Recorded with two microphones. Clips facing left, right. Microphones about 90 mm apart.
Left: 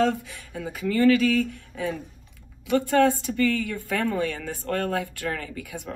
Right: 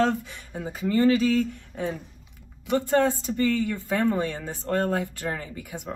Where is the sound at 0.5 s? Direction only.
30° right (ahead or behind).